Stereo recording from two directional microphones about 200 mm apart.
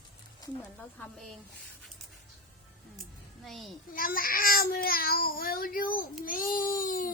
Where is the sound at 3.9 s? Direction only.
45° left (ahead or behind).